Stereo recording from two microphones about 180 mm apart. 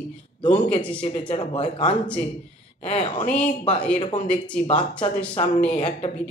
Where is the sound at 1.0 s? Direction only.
30° left (ahead or behind).